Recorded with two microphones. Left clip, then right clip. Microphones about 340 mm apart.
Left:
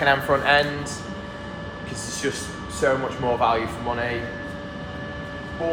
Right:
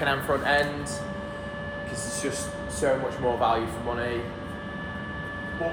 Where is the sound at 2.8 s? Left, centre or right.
Left.